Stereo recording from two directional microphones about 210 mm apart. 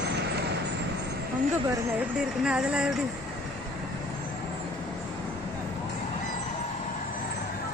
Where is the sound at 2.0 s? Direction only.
5° right (ahead or behind).